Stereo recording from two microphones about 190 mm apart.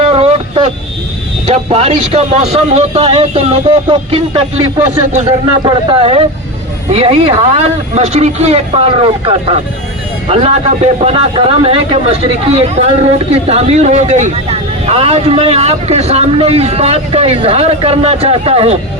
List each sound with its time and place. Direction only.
0.0 s vehicle: 30° right (ahead or behind)
1.5 s speech: 35° right (ahead or behind)
5.6 s speech: 30° right (ahead or behind)